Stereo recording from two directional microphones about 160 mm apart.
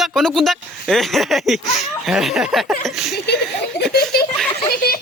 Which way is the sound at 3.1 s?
90° left.